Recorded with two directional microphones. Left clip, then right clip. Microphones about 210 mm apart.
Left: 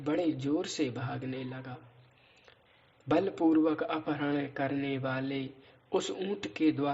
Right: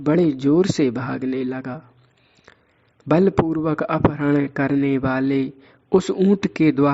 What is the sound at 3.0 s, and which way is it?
Speech, 50° right (ahead or behind).